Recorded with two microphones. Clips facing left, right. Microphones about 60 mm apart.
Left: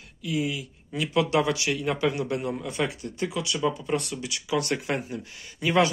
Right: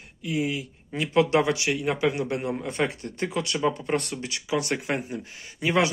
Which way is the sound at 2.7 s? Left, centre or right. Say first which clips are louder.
Right 2 dB; right.